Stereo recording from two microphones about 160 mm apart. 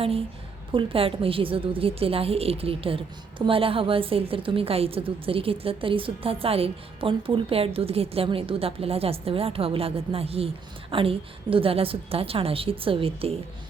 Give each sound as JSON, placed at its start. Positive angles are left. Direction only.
{"t": 0.7, "sound": "a woman's voice", "side_deg": -35}